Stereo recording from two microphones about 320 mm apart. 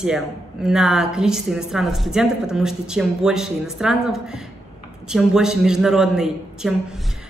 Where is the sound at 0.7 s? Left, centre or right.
Centre.